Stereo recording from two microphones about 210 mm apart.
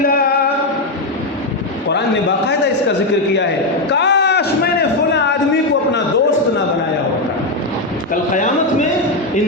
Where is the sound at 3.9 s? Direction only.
55° left (ahead or behind).